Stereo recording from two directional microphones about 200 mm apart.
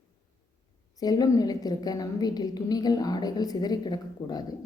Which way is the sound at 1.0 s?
20° left (ahead or behind).